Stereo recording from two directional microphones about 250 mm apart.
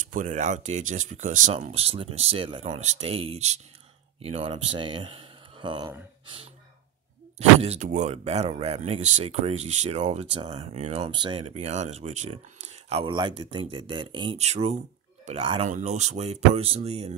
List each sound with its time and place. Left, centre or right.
0.1 s speech: right